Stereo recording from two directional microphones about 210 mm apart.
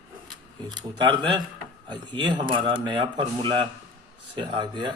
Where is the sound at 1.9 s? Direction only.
20° right (ahead or behind).